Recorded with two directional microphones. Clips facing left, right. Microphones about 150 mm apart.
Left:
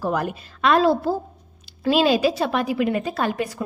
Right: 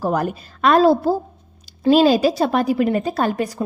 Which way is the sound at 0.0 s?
40° right (ahead or behind).